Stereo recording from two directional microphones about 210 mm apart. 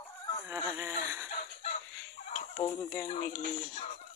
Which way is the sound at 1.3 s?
30° left (ahead or behind).